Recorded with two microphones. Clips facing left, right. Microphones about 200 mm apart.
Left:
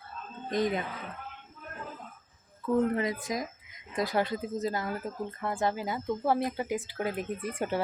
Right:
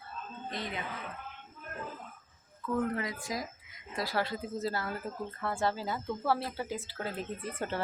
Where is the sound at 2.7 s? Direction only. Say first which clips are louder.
Left 5 dB; 25° left (ahead or behind).